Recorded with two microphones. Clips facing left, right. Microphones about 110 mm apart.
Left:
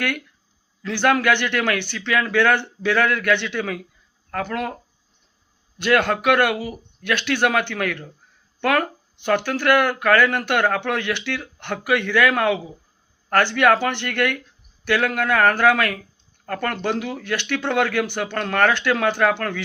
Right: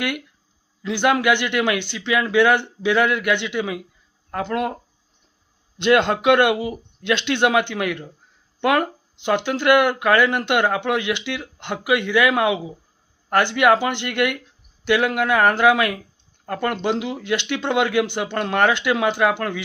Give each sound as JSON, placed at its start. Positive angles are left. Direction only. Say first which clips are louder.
{"t": 0.8, "sound": "speech", "louder": "even", "side_deg": -15}